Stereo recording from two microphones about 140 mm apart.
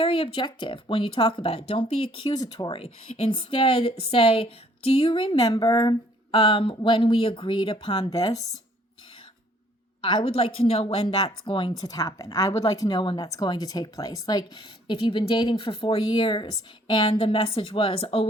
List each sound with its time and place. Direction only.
0.0 s speech: 40° left (ahead or behind)
2.1 s speech: 30° left (ahead or behind)
2.7 s speech: 40° left (ahead or behind)
8.1 s speech: 25° left (ahead or behind)
10.0 s speech: 35° left (ahead or behind)